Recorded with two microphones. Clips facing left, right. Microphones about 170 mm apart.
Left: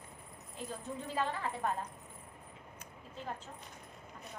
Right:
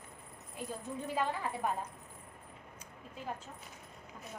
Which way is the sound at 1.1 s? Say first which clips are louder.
Right 1 dB; 10° right (ahead or behind).